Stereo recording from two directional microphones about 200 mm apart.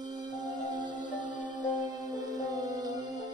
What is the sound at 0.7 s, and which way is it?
Music, 20° right (ahead or behind).